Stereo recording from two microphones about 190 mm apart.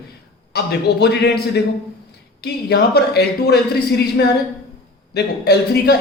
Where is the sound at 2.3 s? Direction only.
60° left (ahead or behind).